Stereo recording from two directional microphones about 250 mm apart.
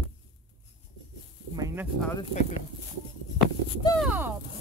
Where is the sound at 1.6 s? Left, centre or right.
Centre.